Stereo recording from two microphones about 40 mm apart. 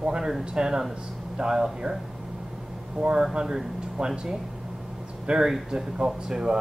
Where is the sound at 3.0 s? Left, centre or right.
Centre.